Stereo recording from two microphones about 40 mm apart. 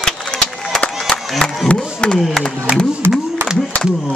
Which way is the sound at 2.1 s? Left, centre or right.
Centre.